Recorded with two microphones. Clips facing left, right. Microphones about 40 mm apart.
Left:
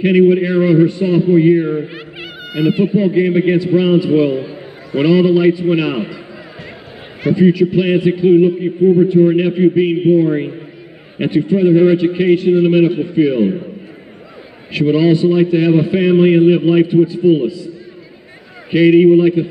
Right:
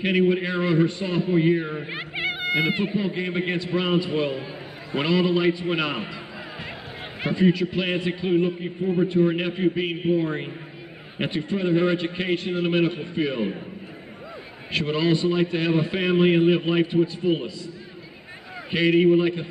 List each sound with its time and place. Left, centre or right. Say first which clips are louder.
0.2 s a man's voice: left 12 dB; centre
1.9 s a sound: right 2 dB; right
2.5 s speech: left 10 dB; right
3.0 s a man's voice: left 13 dB; centre
7.3 s a man's voice: left 9 dB; centre
14.7 s a man's voice: left 10 dB; centre
18.7 s a man's voice: left 10 dB; centre